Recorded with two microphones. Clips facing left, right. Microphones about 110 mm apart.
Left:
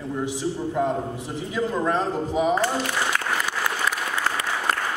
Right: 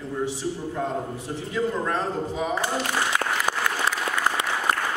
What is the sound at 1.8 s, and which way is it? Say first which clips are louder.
Speech: left 3 dB; 20° left (ahead or behind).